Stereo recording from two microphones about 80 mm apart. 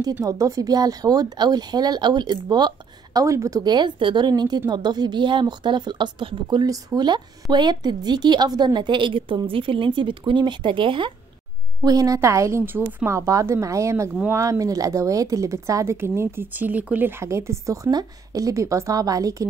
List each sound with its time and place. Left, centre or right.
0.2 s speech: right
3.3 s speech: right
3.6 s a woman's voice: right
4.3 s a woman's voice: right
6.6 s a woman's voice: right
7.0 s a woman's voice: right
11.8 s speech: right
17.9 s a woman's voice: right